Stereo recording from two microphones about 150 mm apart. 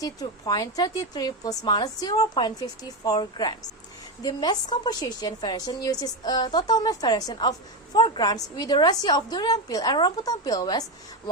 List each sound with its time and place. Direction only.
0.0 s a woman's voice: 25° left (ahead or behind)